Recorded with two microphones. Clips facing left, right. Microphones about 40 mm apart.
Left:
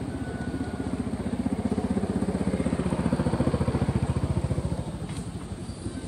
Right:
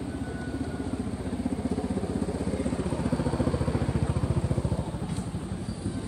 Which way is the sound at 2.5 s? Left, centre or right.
Left.